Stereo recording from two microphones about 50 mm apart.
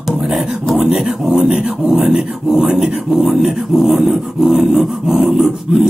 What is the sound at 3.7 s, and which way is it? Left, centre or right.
Music, centre.